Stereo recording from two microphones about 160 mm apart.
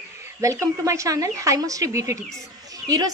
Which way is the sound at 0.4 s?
20° right (ahead or behind).